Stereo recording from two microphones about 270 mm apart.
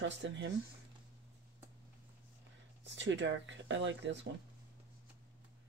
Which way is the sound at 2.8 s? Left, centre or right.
Right.